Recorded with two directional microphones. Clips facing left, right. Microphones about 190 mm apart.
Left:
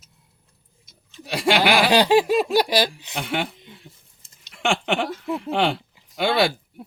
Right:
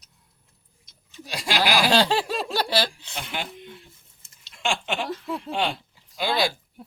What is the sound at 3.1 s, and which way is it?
Speech, 65° left (ahead or behind).